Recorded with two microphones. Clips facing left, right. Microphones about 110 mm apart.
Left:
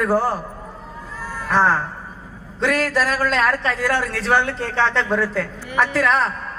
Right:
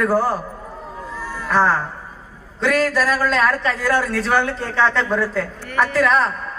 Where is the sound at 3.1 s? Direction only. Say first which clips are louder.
Right 1 dB; 30° right (ahead or behind).